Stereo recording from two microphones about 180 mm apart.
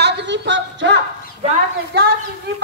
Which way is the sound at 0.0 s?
80° right.